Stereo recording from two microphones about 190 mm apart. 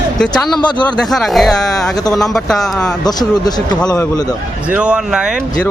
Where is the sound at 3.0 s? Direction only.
20° left (ahead or behind).